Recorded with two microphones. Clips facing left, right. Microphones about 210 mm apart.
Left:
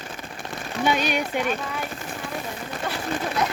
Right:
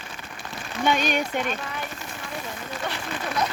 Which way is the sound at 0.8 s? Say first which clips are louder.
Even; 10° left (ahead or behind).